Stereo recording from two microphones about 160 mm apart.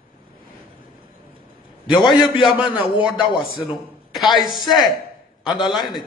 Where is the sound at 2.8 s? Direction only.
30° left (ahead or behind).